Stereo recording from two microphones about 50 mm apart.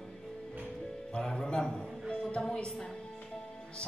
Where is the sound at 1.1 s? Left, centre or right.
Left.